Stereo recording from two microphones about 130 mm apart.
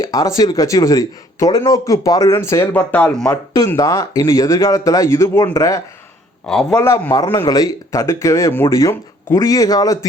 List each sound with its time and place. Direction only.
0.0 s speech: 25° left (ahead or behind); by 3.2 s 10° left (ahead or behind)
3.2 s speech: 30° left (ahead or behind)
6.4 s a man's voice: 5° left (ahead or behind)
6.7 s speech: 20° left (ahead or behind)